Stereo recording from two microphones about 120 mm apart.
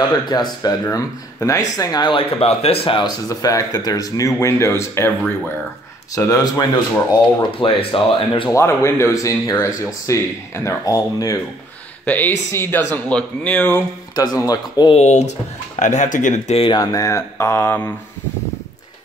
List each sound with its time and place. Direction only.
0.3 s speech: 35° left (ahead or behind)
3.3 s speech: 30° left (ahead or behind)
6.1 s speech: 30° left (ahead or behind)
7.5 s speech: 45° left (ahead or behind)
8.5 s speech: 25° left (ahead or behind)
12.1 s speech: 20° left (ahead or behind)
14.1 s speech: 35° left (ahead or behind)
15.0 s speech: 75° left (ahead or behind); by 16.5 s 90° left
16.5 s speech: 50° left (ahead or behind)
16.8 s speech: 30° left (ahead or behind)